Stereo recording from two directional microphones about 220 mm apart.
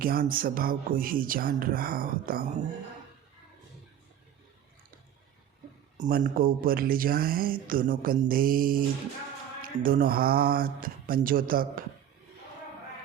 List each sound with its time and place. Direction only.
0.0 s speech: 40° right (ahead or behind)
6.0 s speech: 40° right (ahead or behind)